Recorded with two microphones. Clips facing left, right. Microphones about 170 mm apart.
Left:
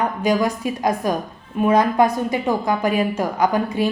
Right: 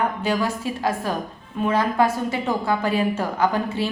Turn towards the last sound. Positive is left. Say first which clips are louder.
# left 3 dB
turn(degrees=15)  # may be behind; listen again after turning